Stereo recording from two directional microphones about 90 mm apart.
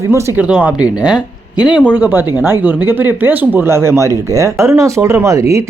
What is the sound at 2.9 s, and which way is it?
Speech, 25° right (ahead or behind).